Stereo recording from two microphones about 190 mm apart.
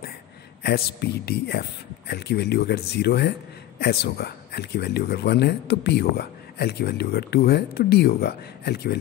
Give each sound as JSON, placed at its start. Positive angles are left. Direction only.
{"t": 0.7, "sound": "speech", "side_deg": 55}